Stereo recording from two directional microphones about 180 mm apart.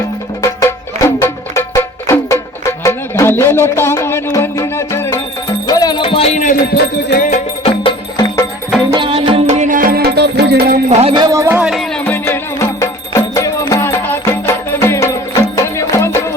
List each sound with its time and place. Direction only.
0.4 s music: 15° left (ahead or behind); by 7.3 s 65° left (ahead or behind)
7.3 s music: 45° left (ahead or behind)
7.9 s music: 25° left (ahead or behind)
8.9 s music: 30° right (ahead or behind)
9.6 s music: 50° right (ahead or behind)
10.8 s music: 40° right (ahead or behind)
11.1 s speech: 20° right (ahead or behind)
11.7 s music: 5° left (ahead or behind)